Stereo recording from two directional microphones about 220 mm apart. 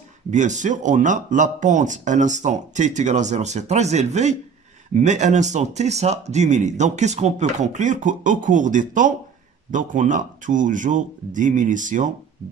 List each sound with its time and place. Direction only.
0.3 s speech: 35° right (ahead or behind)